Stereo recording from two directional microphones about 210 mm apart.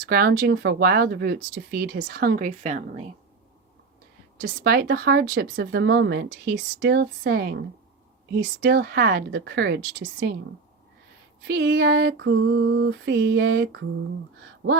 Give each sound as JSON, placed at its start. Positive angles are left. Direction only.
{"t": 0.1, "sound": "speech", "side_deg": -45}
{"t": 4.4, "sound": "speech", "side_deg": -45}
{"t": 11.4, "sound": "a sound", "side_deg": -55}